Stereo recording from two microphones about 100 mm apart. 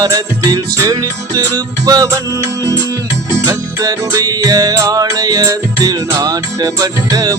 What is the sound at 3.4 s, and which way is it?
Music, 40° right (ahead or behind).